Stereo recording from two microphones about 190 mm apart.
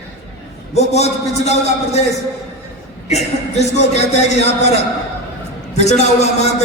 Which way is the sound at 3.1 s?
35° left (ahead or behind).